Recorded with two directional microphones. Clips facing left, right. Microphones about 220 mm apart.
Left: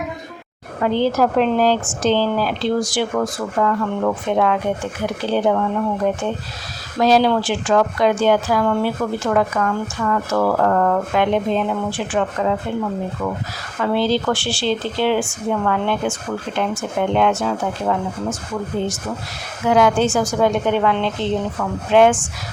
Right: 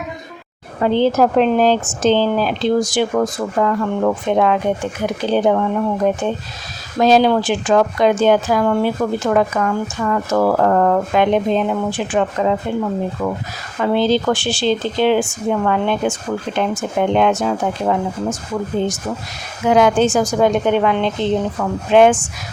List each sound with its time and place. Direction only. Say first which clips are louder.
0.8 s speech: right 3 dB; 25° right (ahead or behind)
13.7 s speech: right 3 dB; 20° right (ahead or behind)
19.6 s speech: right 2 dB; 20° right (ahead or behind)